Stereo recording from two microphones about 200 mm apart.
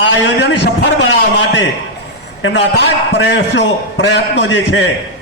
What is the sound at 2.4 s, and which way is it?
A man's voice, 60° left (ahead or behind).